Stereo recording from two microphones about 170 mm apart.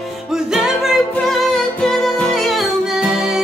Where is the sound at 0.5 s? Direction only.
Centre (ahead or behind).